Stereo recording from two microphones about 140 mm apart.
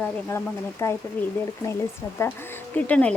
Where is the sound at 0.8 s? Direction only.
20° left (ahead or behind).